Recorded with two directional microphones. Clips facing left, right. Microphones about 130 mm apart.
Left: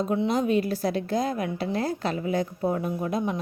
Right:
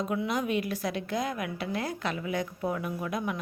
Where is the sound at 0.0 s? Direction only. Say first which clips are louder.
Left 5 dB; 30° left (ahead or behind).